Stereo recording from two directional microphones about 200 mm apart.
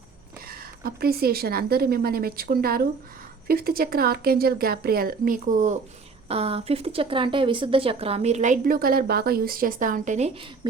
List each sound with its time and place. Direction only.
0.4 s a woman's voice: 50° right (ahead or behind); by 10.7 s 30° right (ahead or behind)